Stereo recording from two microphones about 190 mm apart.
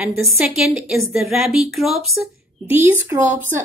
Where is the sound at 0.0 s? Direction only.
Centre (ahead or behind).